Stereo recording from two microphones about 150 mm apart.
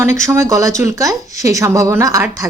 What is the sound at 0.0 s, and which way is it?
A woman's voice, 20° right (ahead or behind).